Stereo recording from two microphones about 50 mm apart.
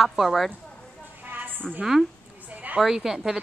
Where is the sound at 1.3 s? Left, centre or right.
Right.